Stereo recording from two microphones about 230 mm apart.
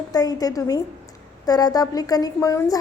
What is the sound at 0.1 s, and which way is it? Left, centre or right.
Speech, centre.